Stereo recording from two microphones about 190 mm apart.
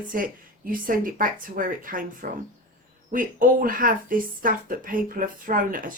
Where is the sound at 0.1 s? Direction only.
45° right (ahead or behind).